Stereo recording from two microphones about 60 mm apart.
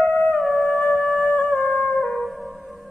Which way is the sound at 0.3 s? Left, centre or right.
Centre.